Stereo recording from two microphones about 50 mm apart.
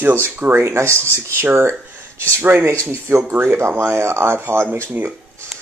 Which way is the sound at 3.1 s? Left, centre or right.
Right.